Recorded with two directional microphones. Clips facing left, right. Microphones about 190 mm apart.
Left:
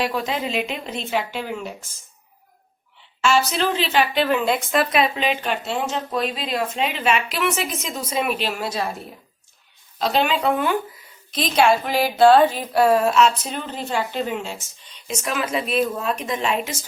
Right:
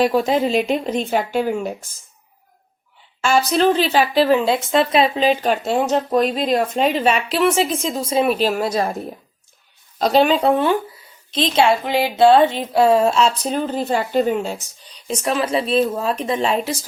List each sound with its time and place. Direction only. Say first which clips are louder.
0.0 s speech: right 8 dB; 40° right (ahead or behind)
3.2 s speech: right 4 dB; 40° right (ahead or behind)
10.0 s speech: right 5 dB; 40° right (ahead or behind)